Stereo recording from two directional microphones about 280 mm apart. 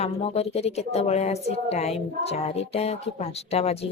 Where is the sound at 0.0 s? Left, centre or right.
Left.